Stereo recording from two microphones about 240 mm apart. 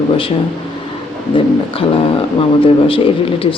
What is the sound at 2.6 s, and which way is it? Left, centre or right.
Speech, left.